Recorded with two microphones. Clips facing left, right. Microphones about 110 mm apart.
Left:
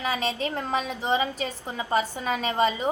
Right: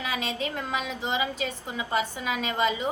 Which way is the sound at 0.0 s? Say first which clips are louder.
Left 3 dB; 35° left (ahead or behind).